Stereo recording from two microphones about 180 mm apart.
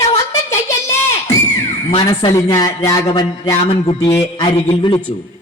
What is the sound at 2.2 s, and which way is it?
Speech, 20° left (ahead or behind).